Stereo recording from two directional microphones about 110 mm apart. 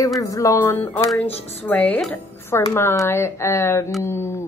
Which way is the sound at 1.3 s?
65° left (ahead or behind).